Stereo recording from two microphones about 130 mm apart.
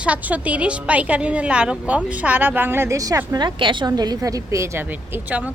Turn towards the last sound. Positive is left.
turn(degrees=-15)  # may be behind; listen again after turning